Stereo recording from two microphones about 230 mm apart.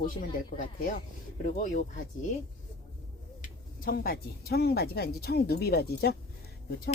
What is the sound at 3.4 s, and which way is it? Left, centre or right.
A woman's voice, left.